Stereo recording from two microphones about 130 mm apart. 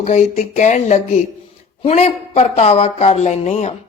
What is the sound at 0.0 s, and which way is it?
Speech, 60° left (ahead or behind).